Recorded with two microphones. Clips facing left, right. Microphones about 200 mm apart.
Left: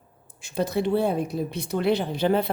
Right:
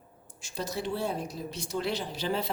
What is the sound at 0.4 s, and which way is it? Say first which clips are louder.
Speech: left 9 dB; 60° left (ahead or behind).